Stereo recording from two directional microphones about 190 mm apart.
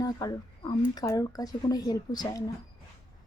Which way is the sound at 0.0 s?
20° left (ahead or behind).